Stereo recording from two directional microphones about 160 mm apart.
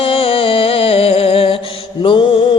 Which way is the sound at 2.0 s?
30° left (ahead or behind).